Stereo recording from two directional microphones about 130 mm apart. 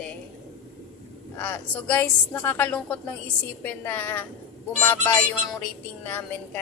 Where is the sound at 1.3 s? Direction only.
10° left (ahead or behind).